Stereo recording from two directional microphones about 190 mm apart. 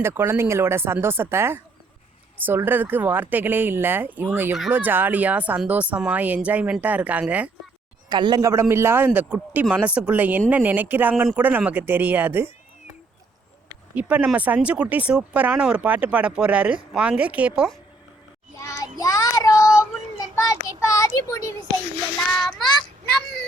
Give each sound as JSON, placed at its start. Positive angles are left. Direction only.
{"t": 0.0, "sound": "speech", "side_deg": -15}
{"t": 8.1, "sound": "speech", "side_deg": -20}
{"t": 13.9, "sound": "speech", "side_deg": -10}
{"t": 18.6, "sound": "child singing", "side_deg": 15}
{"t": 20.3, "sound": "a child's voice", "side_deg": 15}